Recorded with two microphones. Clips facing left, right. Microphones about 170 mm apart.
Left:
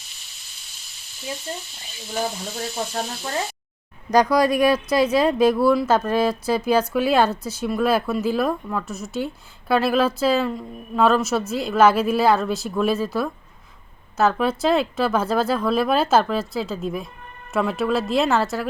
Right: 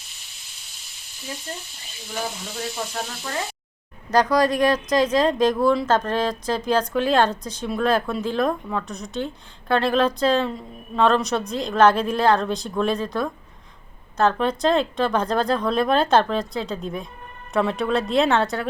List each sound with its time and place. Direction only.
2.8 s frying: 30° left (ahead or behind)
4.1 s speech: 10° left (ahead or behind)